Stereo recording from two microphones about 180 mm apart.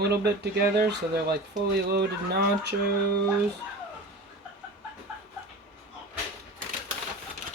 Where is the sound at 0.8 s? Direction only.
65° right (ahead or behind).